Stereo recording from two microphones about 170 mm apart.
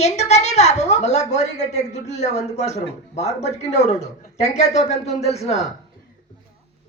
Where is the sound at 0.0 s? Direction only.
40° left (ahead or behind).